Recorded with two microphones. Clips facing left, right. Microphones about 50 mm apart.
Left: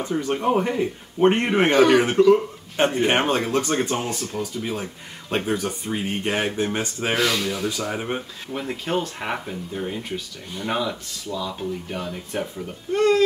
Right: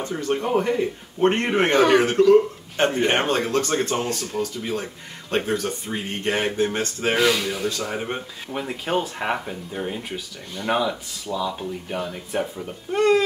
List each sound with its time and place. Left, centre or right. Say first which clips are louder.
0.0 s speech: left 2 dB; centre
1.7 s speech: left 1 dB; centre
7.2 s speech: right 2 dB; centre
8.5 s speech: right 1 dB; centre